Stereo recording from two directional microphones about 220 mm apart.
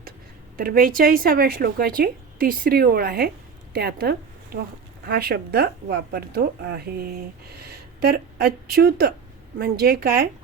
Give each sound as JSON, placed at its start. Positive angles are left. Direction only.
{"t": 0.5, "sound": "speech", "side_deg": -40}